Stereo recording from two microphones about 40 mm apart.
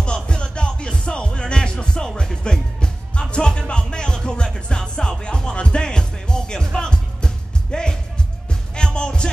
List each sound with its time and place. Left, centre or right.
0.0 s music: left